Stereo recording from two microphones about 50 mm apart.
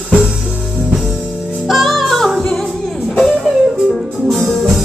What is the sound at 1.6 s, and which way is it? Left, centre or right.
Music, centre.